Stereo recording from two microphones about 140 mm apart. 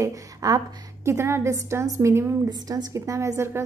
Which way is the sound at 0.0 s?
25° right (ahead or behind).